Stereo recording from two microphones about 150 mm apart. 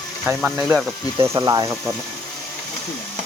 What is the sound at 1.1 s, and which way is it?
Speech, 20° right (ahead or behind).